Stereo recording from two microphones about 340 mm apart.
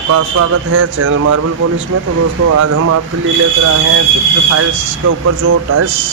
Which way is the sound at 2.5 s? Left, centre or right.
Right.